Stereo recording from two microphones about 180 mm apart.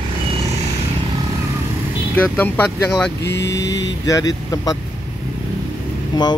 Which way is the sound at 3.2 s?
70° left (ahead or behind).